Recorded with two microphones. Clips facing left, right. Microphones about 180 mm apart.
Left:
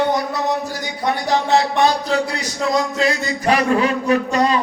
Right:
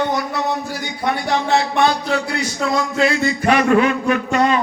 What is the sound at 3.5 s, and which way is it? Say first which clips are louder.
A man's voice: right 2 dB; 35° left (ahead or behind).